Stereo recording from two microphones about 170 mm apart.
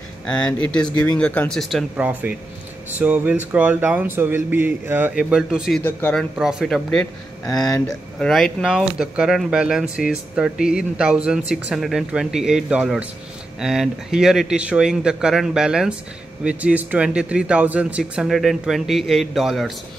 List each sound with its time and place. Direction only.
0.3 s speech: 5° left (ahead or behind)
5.8 s speech: 10° left (ahead or behind)
6.3 s speech: centre (ahead or behind)
7.4 s speech: 20° left (ahead or behind)
7.8 s speech: centre (ahead or behind)